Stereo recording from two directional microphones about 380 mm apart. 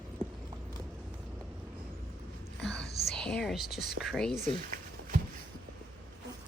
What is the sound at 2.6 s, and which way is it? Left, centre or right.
Whispering, centre.